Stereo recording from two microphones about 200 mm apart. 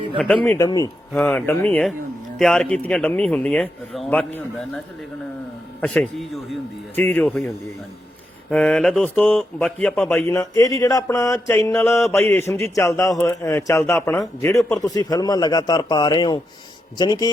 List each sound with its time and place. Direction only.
0.2 s a man's voice: 5° left (ahead or behind)
5.8 s a man's voice: 5° left (ahead or behind)
10.2 s a man's voice: 15° left (ahead or behind)
14.2 s a man's voice: centre (ahead or behind)
14.6 s a man's voice: 15° left (ahead or behind)